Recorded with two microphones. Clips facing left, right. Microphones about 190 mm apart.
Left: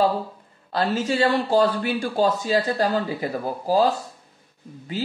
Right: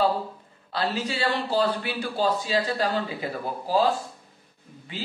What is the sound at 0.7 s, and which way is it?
Speech, 45° left (ahead or behind).